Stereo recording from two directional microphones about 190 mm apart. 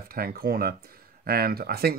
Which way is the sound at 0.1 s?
50° right (ahead or behind).